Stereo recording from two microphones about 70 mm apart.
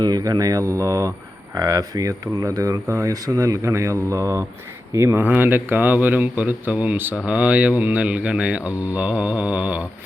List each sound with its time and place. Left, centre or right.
0.0 s speech: right
5.1 s speech: right